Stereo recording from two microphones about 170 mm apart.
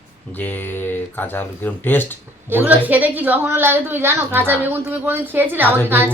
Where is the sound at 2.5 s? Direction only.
10° right (ahead or behind).